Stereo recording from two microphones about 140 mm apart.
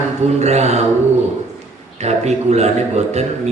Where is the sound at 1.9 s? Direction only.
50° right (ahead or behind).